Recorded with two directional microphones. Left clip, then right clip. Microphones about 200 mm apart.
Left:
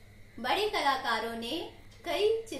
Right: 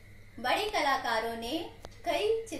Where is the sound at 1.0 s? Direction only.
15° left (ahead or behind).